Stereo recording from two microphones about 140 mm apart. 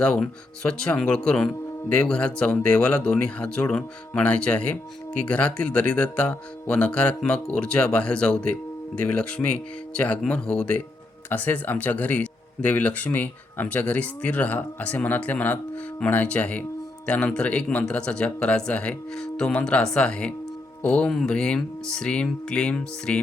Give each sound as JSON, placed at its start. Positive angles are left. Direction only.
{"t": 0.0, "sound": "speech", "side_deg": 5}